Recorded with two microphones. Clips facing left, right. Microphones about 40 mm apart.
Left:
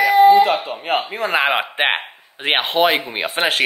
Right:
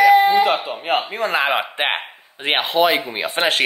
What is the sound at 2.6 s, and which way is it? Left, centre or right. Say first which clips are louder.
Speech: even; left.